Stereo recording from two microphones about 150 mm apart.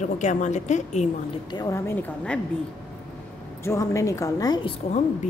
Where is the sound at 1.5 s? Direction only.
25° left (ahead or behind).